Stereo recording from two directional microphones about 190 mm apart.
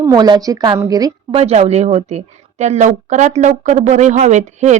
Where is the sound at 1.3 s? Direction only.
35° right (ahead or behind).